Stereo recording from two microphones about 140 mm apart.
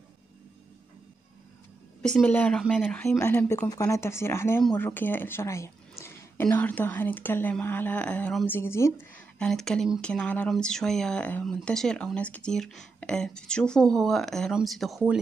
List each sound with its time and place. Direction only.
2.0 s speech: 5° left (ahead or behind)
3.1 s speech: 20° left (ahead or behind)
8.5 s speech: 20° left (ahead or behind)
9.1 s speech: 5° left (ahead or behind)